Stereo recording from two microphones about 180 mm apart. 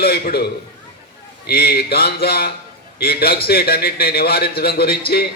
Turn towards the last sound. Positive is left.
turn(degrees=60)  # may be behind; listen again after turning